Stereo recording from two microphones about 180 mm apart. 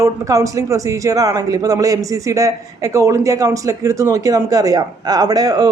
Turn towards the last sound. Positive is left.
turn(degrees=-20)  # may be behind; listen again after turning